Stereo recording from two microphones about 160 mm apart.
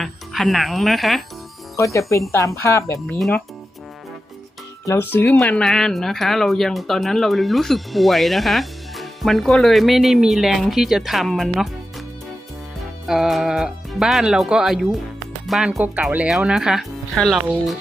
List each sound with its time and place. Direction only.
0.0 s speech: centre (ahead or behind)
1.7 s speech: 20° left (ahead or behind)
3.2 s speech: 5° left (ahead or behind)
4.9 s speech: 15° left (ahead or behind)
13.1 s speech: centre (ahead or behind)